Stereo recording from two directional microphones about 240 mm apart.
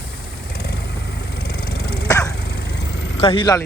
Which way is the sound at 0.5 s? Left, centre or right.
Left.